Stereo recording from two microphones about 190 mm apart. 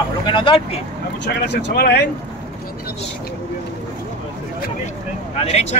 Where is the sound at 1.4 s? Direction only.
60° left (ahead or behind).